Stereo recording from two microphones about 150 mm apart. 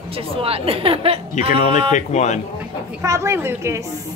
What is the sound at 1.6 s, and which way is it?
Speech, 55° left (ahead or behind).